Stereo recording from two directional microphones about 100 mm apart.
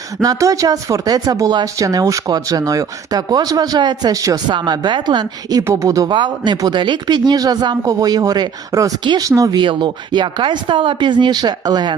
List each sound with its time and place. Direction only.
0.2 s speech: 35° right (ahead or behind)
4.4 s speech: 50° right (ahead or behind)
5.6 s speech: 35° right (ahead or behind)
9.6 s speech: 50° right (ahead or behind)